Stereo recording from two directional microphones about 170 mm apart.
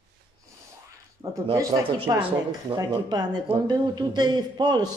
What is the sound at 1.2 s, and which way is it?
A man's voice, 20° right (ahead or behind).